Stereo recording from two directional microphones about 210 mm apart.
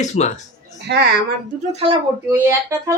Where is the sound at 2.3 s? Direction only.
10° right (ahead or behind).